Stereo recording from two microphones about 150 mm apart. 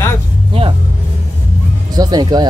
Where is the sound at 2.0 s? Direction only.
25° right (ahead or behind).